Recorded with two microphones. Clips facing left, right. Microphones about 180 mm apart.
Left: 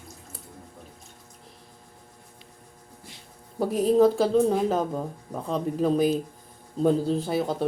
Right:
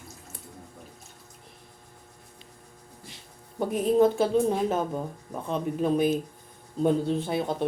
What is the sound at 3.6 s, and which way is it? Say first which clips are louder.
Speech: left 2 dB; 35° left (ahead or behind).